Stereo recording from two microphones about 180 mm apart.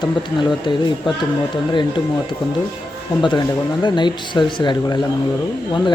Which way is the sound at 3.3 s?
25° left (ahead or behind).